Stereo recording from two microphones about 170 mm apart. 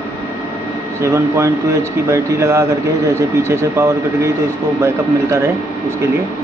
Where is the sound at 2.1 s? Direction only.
15° right (ahead or behind).